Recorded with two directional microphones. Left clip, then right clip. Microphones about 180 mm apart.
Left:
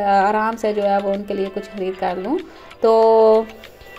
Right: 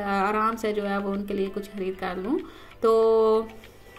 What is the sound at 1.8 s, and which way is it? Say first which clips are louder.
Speech: left 6 dB; 50° left (ahead or behind).